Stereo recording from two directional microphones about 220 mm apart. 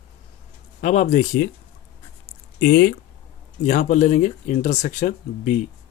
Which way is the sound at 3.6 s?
35° left (ahead or behind).